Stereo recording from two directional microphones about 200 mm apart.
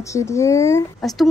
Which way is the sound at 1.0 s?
Centre (ahead or behind).